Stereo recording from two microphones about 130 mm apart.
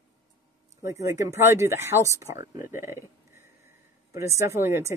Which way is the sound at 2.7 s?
20° right (ahead or behind).